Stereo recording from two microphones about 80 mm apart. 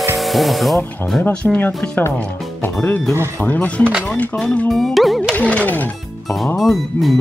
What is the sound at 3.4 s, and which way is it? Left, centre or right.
Speech, centre.